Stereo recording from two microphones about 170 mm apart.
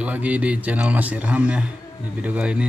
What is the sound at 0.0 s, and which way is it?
A man's voice, 10° right (ahead or behind).